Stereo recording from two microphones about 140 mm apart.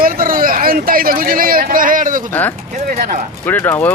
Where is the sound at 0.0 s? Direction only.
90° right; by 2.2 s 75° right (ahead or behind).